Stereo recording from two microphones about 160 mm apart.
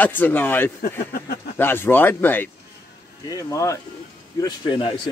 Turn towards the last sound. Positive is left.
turn(degrees=30)  # may be behind; listen again after turning